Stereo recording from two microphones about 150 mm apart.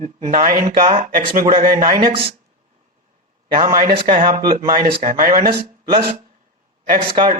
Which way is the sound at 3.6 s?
35° right (ahead or behind).